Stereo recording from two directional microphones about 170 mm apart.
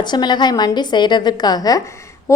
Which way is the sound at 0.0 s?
25° left (ahead or behind).